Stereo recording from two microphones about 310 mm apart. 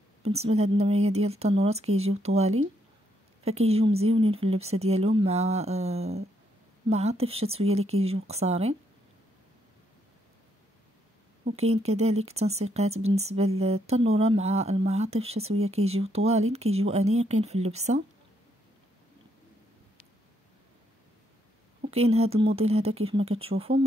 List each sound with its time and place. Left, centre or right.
0.2 s speech: centre
11.4 s speech: centre
21.9 s speech: centre